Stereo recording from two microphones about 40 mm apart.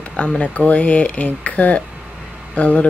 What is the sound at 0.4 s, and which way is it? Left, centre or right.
Speech, left.